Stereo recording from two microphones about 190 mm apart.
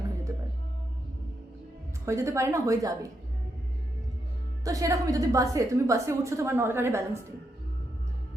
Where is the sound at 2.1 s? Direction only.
15° right (ahead or behind).